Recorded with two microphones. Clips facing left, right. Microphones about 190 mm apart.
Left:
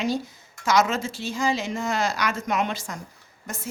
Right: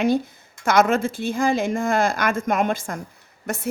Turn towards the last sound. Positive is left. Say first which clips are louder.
# right 8 dB
turn(degrees=-70)  # may be behind; listen again after turning